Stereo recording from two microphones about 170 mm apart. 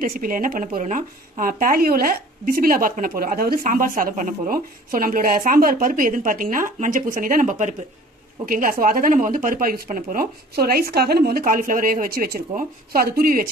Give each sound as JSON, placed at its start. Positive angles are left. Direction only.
{"t": 0.0, "sound": "a woman's voice", "side_deg": -55}